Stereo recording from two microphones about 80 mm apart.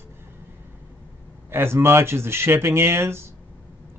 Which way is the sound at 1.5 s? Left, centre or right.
Right.